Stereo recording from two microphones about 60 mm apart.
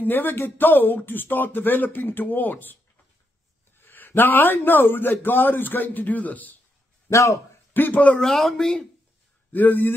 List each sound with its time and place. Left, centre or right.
0.0 s speech: left
7.1 s speech: left
7.7 s a man's voice: left
8.2 s speech: centre
9.5 s speech: left